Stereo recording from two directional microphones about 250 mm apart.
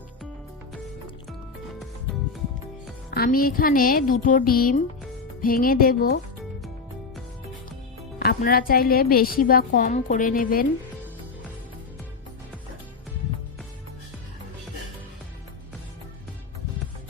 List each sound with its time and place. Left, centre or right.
3.1 s a woman's voice: left
8.2 s a woman's voice: left